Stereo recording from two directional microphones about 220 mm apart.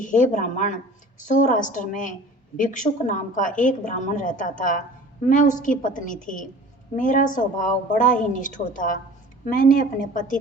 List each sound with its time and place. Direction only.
0.0 s a woman's voice: 35° left (ahead or behind)